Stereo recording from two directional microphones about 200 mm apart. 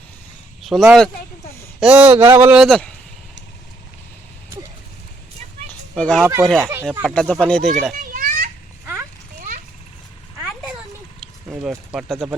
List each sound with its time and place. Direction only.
0.6 s a man's voice: centre (ahead or behind)
5.9 s speech: 5° left (ahead or behind)
7.9 s children playing: 45° right (ahead or behind)
11.2 s a sound: 5° right (ahead or behind)
11.9 s speech: 5° right (ahead or behind)